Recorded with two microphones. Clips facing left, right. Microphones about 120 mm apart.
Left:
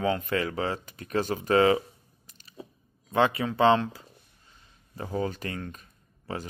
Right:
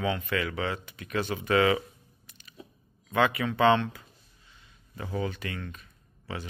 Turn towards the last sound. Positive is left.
turn(degrees=45)  # may be behind; listen again after turning